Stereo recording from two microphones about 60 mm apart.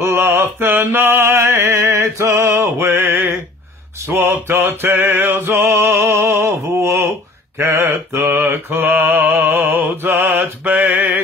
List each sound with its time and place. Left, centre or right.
0.0 s mantra: right
1.2 s music: right
4.1 s mantra: right